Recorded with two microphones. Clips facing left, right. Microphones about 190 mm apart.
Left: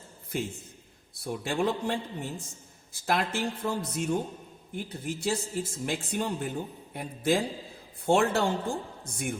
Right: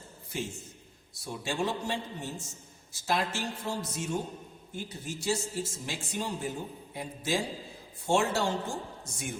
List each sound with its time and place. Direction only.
0.3 s a man's voice: 55° left (ahead or behind)